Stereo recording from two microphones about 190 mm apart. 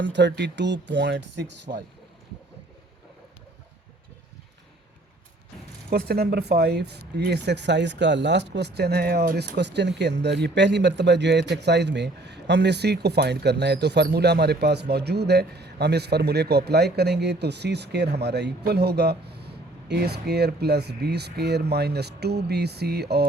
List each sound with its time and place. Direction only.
0.0 s speech: 65° right (ahead or behind)
5.9 s speech: 55° right (ahead or behind)